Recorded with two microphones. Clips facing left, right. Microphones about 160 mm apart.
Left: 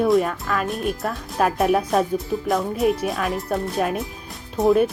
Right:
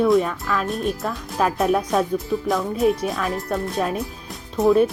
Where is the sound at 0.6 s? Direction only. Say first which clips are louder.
Even; centre (ahead or behind).